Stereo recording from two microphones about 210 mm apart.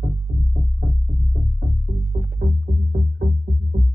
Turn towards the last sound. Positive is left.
turn(degrees=-50)  # may be behind; listen again after turning